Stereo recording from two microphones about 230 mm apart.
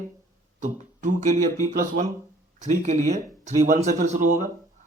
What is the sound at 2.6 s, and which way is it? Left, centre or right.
Speech, right.